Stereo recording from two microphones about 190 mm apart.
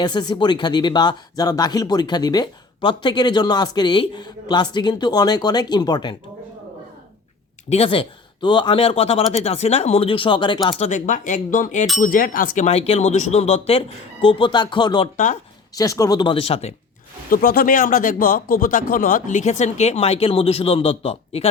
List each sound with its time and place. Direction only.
0.0 s speech: 25° left (ahead or behind)
7.7 s speech: 30° left (ahead or behind)
10.8 s speech: 40° left (ahead or behind); by 15.1 s 25° left (ahead or behind)
15.1 s speech: 40° left (ahead or behind)
15.7 s speech: 15° left (ahead or behind)
17.2 s speech: 50° left (ahead or behind); by 21.5 s 30° left (ahead or behind)